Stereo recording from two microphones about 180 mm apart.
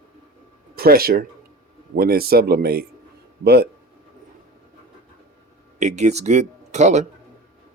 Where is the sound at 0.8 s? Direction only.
55° right (ahead or behind).